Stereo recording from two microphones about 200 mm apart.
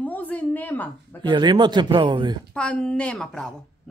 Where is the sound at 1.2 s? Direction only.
20° right (ahead or behind).